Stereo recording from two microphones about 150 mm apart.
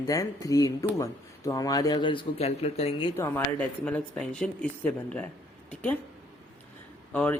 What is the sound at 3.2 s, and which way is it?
Speech, 15° left (ahead or behind).